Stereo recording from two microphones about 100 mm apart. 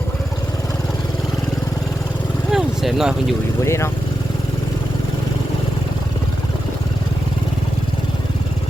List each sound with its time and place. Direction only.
2.5 s speech: 5° right (ahead or behind)
3.6 s speech: 30° left (ahead or behind)